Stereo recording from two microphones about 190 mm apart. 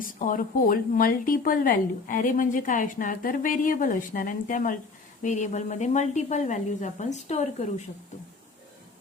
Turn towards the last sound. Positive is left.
turn(degrees=35)  # may be behind; listen again after turning